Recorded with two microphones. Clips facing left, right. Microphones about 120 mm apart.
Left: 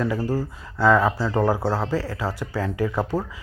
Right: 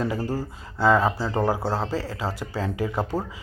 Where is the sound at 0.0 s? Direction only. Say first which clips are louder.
Left 3 dB; 20° right (ahead or behind).